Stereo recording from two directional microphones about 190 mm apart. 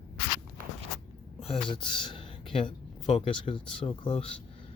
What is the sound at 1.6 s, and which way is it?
Speech, 25° left (ahead or behind).